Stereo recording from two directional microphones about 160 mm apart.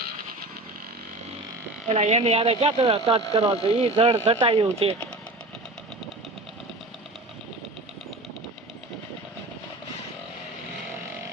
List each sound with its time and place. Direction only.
1.9 s speech: 45° right (ahead or behind)